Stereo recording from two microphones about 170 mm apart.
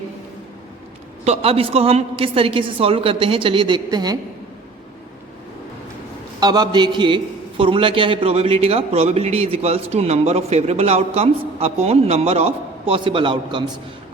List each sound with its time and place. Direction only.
1.2 s a man's voice: 35° right (ahead or behind)
6.4 s a man's voice: 25° right (ahead or behind)